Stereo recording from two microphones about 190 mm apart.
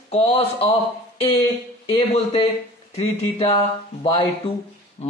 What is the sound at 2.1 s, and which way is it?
Speech, 35° left (ahead or behind).